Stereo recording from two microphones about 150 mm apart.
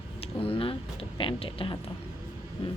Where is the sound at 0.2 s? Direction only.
40° left (ahead or behind).